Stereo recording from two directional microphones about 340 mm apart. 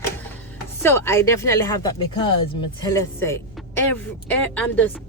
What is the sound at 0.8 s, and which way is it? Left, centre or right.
Speech, centre.